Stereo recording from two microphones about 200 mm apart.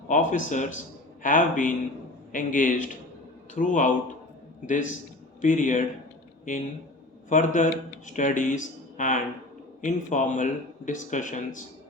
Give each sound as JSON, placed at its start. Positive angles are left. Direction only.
{"t": 0.1, "sound": "speech", "side_deg": 40}